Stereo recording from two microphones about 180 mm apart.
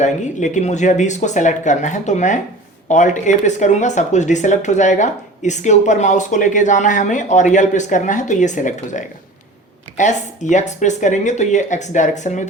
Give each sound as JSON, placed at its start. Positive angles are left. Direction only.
{"t": 0.0, "sound": "speech", "side_deg": 40}